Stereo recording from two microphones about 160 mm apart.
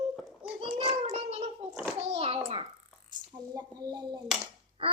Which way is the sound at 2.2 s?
35° right (ahead or behind).